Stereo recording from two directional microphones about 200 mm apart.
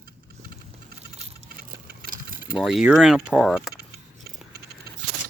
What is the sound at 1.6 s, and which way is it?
Engine, 50° right (ahead or behind).